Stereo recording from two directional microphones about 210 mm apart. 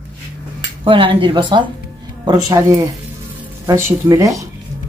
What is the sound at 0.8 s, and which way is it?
Speech, 25° right (ahead or behind).